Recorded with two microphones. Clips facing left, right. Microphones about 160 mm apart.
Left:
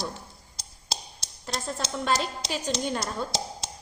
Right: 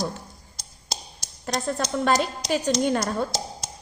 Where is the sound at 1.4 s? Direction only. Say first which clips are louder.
Right 6 dB; 65° right (ahead or behind).